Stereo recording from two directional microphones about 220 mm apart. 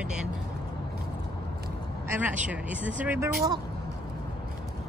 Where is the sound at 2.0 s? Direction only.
5° right (ahead or behind).